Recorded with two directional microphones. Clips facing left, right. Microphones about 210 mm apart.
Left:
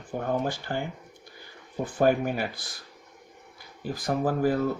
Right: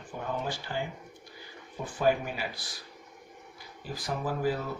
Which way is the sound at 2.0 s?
50° left (ahead or behind).